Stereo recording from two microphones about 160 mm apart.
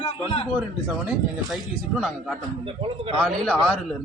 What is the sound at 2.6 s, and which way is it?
Speech, 35° right (ahead or behind).